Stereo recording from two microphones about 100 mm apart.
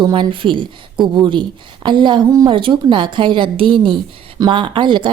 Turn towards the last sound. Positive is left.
turn(degrees=-50)  # may be behind; listen again after turning